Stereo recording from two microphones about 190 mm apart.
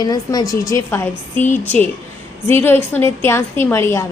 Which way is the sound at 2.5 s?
10° left (ahead or behind).